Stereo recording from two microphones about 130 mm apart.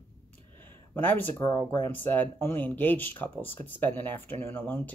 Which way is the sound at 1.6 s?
40° right (ahead or behind).